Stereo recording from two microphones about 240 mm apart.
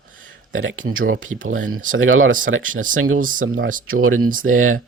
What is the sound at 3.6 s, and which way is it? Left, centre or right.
Speech, right.